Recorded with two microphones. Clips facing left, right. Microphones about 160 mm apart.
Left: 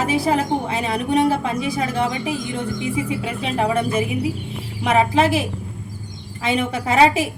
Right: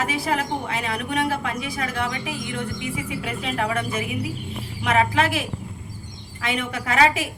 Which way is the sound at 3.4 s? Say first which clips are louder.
Left 6 dB; 25° left (ahead or behind).